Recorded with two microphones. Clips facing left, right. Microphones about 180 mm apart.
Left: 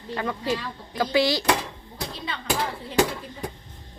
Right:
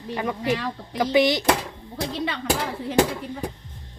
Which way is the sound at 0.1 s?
15° right (ahead or behind).